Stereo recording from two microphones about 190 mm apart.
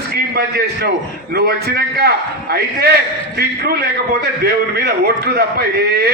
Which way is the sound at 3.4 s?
55° right (ahead or behind).